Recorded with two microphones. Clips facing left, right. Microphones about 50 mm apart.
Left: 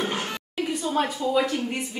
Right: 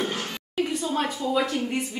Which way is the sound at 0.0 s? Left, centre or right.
Centre.